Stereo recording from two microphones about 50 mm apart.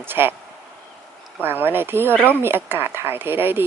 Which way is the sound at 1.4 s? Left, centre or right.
Right.